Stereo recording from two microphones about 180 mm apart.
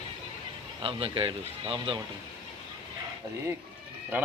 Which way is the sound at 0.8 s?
30° right (ahead or behind).